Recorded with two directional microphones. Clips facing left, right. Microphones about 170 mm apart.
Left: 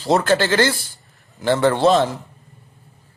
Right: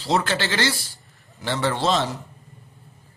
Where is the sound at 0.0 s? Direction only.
50° left (ahead or behind).